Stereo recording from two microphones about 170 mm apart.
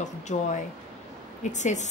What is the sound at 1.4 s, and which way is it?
Speech, 45° left (ahead or behind).